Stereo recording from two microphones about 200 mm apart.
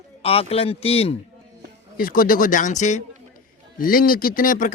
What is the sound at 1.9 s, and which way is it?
Speech, 45° left (ahead or behind).